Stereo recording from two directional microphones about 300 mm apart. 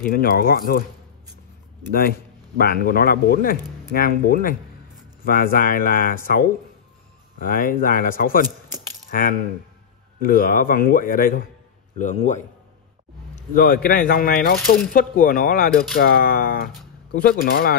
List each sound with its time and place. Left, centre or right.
0.0 s a man's voice: left
2.0 s a man's voice: left
13.6 s a man's voice: left